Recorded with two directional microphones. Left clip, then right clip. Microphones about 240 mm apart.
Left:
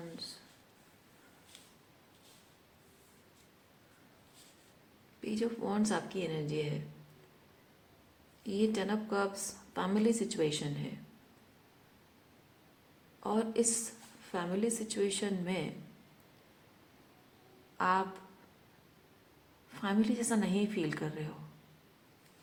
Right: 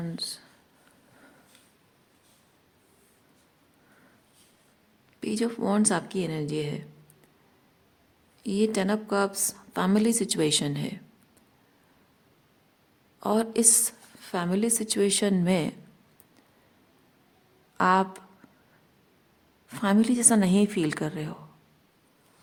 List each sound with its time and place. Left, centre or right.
5.2 s a woman's voice: right
8.4 s a woman's voice: right
13.1 s a woman's voice: right
17.7 s speech: right
19.7 s a woman's voice: right